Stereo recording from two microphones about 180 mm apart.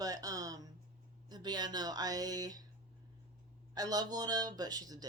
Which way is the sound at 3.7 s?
20° right (ahead or behind).